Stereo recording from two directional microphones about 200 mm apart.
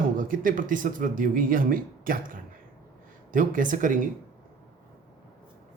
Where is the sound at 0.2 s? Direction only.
45° right (ahead or behind).